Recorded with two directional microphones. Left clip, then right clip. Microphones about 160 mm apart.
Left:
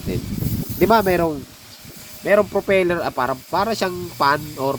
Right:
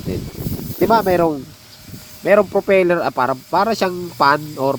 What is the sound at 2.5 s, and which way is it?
Speech, 40° right (ahead or behind).